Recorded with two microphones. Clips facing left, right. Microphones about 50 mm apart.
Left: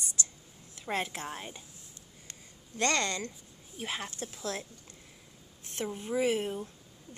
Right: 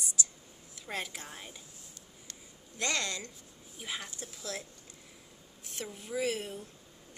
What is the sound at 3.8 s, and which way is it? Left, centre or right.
Speech, left.